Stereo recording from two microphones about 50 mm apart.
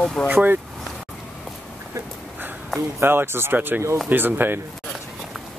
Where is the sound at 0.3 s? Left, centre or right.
Right.